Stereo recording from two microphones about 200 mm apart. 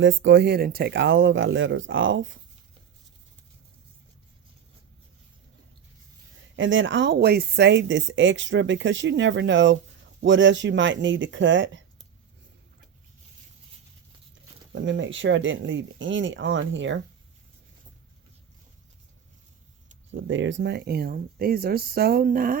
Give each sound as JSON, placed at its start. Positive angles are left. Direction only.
{"t": 0.0, "sound": "a woman's voice", "side_deg": -70}
{"t": 6.6, "sound": "a woman's voice", "side_deg": -70}
{"t": 14.7, "sound": "speech", "side_deg": -65}
{"t": 20.1, "sound": "speech", "side_deg": -70}